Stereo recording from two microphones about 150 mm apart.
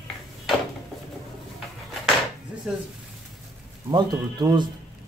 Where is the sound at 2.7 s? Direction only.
5° right (ahead or behind).